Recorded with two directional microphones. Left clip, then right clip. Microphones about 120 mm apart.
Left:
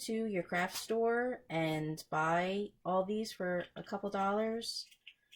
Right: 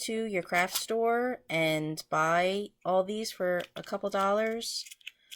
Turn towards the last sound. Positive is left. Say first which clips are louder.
# right 6 dB
turn(degrees=-20)  # may be behind; listen again after turning